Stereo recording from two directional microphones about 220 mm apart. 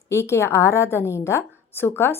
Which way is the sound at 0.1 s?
10° left (ahead or behind).